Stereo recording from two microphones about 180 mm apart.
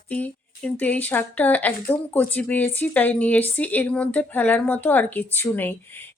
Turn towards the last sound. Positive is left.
turn(degrees=10)  # may be behind; listen again after turning